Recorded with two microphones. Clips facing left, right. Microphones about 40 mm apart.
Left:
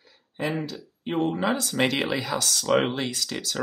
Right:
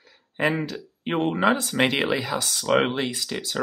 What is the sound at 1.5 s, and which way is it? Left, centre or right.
Speech, right.